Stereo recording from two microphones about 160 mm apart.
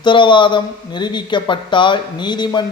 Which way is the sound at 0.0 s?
30° left (ahead or behind).